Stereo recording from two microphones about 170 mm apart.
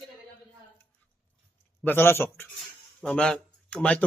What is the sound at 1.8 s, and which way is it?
A man's voice, 15° left (ahead or behind).